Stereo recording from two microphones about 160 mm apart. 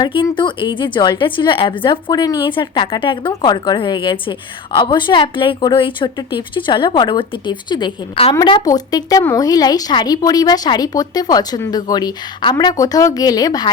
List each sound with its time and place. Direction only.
0.0 s a woman's voice: 30° left (ahead or behind)